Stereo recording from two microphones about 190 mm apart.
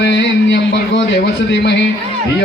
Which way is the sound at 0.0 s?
70° left (ahead or behind).